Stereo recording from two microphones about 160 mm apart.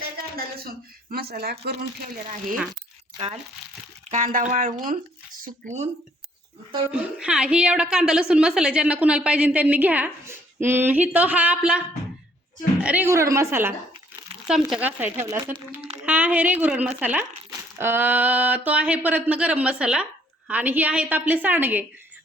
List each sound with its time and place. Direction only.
0.2 s a sound: 70° right (ahead or behind)
1.1 s speech: 80° right
4.1 s speech: 55° right (ahead or behind)
6.9 s a woman's voice: 5° right (ahead or behind)
12.8 s a woman's voice: 10° right (ahead or behind)
14.4 s a woman's voice: 5° right (ahead or behind)